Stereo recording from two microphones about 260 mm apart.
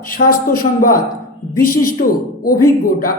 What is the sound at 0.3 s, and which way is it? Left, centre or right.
Speech, left.